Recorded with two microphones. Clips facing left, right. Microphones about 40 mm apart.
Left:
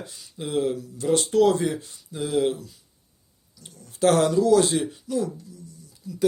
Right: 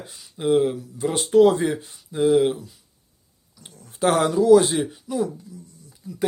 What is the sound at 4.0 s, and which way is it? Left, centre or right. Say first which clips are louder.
A man's voice: even; centre.